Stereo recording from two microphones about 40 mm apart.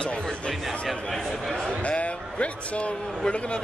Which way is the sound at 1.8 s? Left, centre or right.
Left.